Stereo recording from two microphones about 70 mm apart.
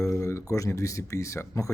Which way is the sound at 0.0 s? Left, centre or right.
Left.